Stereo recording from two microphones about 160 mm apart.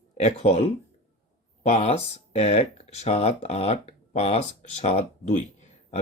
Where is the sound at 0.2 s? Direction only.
40° left (ahead or behind).